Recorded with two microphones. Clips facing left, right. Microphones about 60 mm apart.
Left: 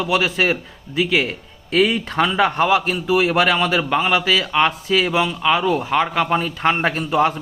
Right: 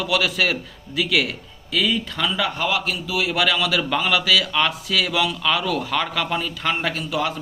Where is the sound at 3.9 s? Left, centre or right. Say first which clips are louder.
Even; left.